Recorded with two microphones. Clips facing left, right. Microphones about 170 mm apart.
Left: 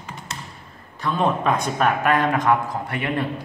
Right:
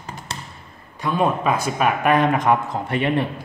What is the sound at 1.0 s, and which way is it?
A man's voice, 10° right (ahead or behind).